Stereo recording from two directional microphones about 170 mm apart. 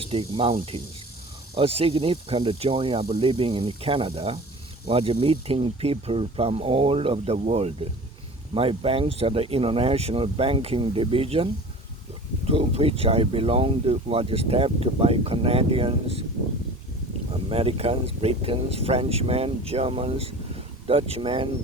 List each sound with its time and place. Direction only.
0.0 s speech: 35° right (ahead or behind)
1.5 s speech: 35° right (ahead or behind)
12.5 s speech: 35° right (ahead or behind)
17.3 s speech: 35° right (ahead or behind)